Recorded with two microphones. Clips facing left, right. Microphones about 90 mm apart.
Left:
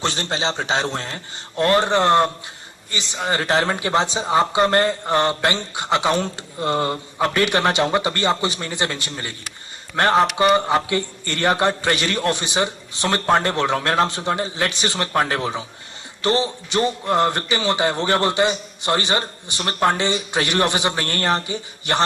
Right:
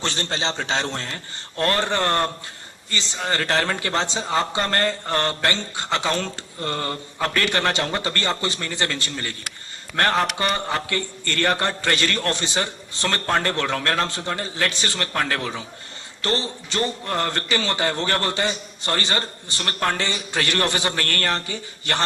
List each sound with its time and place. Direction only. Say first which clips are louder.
0.0 s a man's voice: left 3 dB; 20° left (ahead or behind)